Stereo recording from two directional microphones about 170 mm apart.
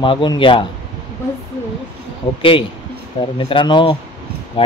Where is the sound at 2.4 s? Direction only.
30° left (ahead or behind).